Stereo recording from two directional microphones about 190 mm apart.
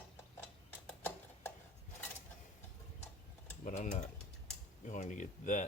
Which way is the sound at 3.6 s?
40° left (ahead or behind).